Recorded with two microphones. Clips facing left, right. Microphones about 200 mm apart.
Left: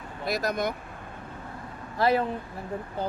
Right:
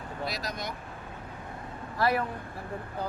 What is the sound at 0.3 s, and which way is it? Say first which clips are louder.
Speech: left 11 dB; 50° left (ahead or behind).